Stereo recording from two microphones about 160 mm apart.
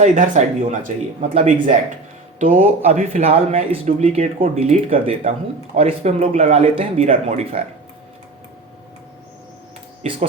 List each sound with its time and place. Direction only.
0.0 s speech: 50° right (ahead or behind)
3.2 s speech: 40° right (ahead or behind)
10.0 s speech: 40° right (ahead or behind)